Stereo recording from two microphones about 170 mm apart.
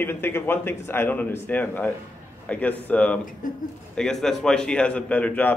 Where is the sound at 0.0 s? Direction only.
15° left (ahead or behind).